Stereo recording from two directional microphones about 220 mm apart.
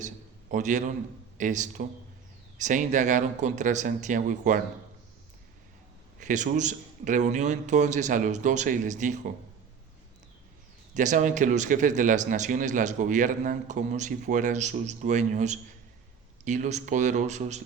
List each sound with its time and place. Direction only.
0.5 s speech: 35° right (ahead or behind)
6.1 s speech: 35° right (ahead or behind)
10.9 s speech: 35° right (ahead or behind)